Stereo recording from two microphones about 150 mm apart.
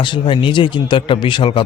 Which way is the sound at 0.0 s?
35° left (ahead or behind).